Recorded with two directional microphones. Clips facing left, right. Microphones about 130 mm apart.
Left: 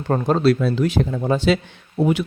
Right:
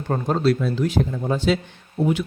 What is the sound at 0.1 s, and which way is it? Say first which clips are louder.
Speech: left 3 dB; 75° left (ahead or behind).